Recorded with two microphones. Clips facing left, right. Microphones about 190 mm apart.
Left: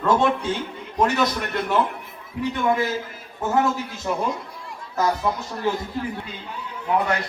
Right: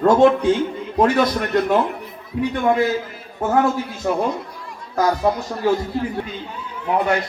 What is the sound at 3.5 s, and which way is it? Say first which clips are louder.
Speech: right 3 dB; 50° right (ahead or behind).